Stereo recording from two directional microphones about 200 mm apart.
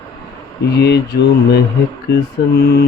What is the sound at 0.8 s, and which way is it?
Mantra, 55° left (ahead or behind).